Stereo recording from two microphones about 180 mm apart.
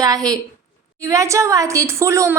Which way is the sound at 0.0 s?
20° right (ahead or behind).